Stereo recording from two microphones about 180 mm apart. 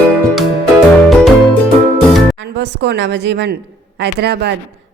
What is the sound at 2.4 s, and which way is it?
A woman's voice, 75° right (ahead or behind).